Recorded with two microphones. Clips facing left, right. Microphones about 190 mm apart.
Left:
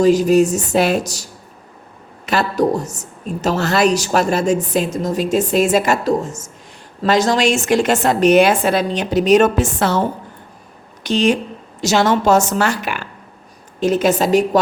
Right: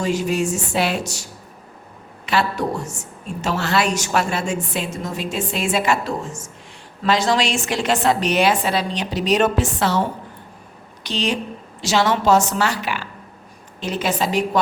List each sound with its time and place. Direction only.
0.0 s a woman's voice: 40° left (ahead or behind)
11.0 s a woman's voice: 50° left (ahead or behind)